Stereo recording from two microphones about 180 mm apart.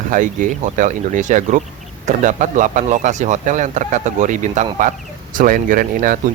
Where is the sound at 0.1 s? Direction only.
45° right (ahead or behind).